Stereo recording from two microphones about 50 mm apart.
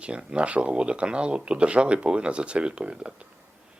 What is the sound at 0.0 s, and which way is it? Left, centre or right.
Speech, right.